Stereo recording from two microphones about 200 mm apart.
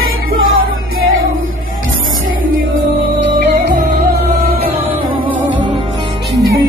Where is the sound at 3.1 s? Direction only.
60° right (ahead or behind).